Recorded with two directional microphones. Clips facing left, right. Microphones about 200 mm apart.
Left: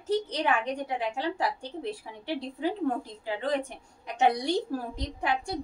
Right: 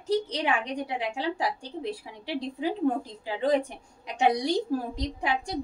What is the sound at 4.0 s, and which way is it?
A woman's voice, 15° right (ahead or behind).